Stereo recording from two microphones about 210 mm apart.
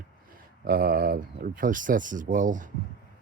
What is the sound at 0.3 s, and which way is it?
Speech, 45° right (ahead or behind).